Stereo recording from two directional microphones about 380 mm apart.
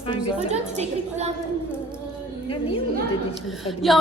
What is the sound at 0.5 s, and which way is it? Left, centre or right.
Speech, centre.